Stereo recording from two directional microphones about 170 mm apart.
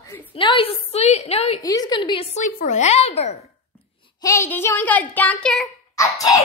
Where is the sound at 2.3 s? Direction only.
50° left (ahead or behind).